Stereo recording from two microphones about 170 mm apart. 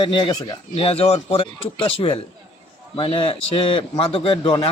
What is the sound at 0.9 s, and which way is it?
A man's voice, 35° left (ahead or behind).